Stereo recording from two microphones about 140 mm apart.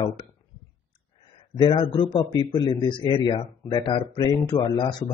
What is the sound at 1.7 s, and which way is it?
A man's voice, 35° left (ahead or behind).